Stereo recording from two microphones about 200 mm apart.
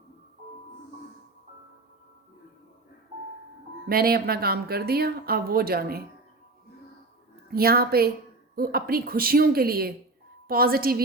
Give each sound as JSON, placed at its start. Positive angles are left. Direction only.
{"t": 3.8, "sound": "speech", "side_deg": -50}
{"t": 7.5, "sound": "speech", "side_deg": -50}